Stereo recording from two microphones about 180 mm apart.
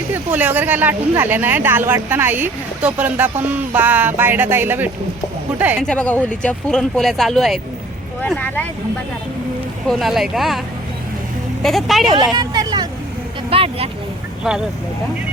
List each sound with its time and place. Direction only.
0.1 s speech: 10° right (ahead or behind)
5.8 s speech: 5° left (ahead or behind)
9.8 s speech: centre (ahead or behind)
11.6 s speech: centre (ahead or behind)
12.3 s vehicle: 25° right (ahead or behind)
13.5 s speech: 30° right (ahead or behind)